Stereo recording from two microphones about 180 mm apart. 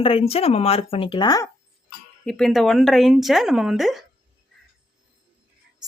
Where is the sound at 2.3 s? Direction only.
5° left (ahead or behind).